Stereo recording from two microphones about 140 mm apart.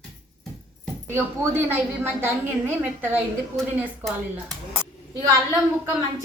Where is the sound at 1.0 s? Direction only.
15° right (ahead or behind).